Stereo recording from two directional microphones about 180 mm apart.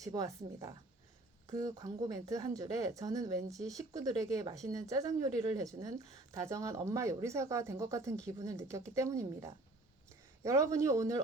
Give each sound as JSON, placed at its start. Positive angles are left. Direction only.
{"t": 0.0, "sound": "speech", "side_deg": -20}